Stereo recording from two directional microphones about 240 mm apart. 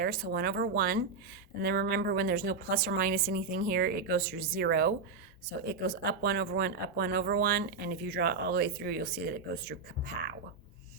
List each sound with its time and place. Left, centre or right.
0.0 s speech: right